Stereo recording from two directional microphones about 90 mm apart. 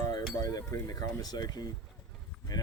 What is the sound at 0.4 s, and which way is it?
Speech, 40° left (ahead or behind).